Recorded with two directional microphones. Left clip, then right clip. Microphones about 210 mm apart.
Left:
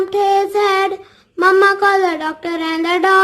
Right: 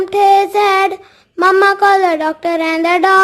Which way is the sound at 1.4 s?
25° right (ahead or behind).